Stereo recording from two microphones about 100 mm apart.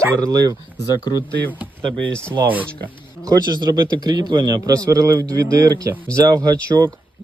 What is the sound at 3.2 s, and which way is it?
Speech, 45° right (ahead or behind).